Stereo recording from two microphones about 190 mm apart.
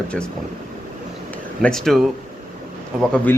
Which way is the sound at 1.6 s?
Centre (ahead or behind).